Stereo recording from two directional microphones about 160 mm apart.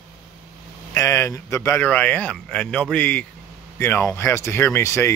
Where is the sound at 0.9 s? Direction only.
15° left (ahead or behind).